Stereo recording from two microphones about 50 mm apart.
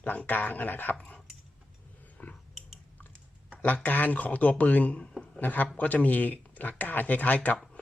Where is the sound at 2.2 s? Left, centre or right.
Left.